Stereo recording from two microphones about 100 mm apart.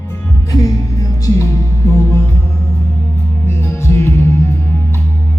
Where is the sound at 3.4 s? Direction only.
25° left (ahead or behind).